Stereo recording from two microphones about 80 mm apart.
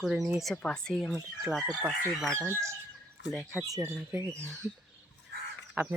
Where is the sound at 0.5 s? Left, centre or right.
Centre.